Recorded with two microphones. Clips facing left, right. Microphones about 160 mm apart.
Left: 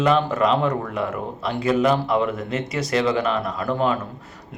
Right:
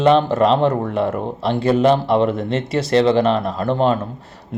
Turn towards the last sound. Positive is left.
turn(degrees=-30)  # may be behind; listen again after turning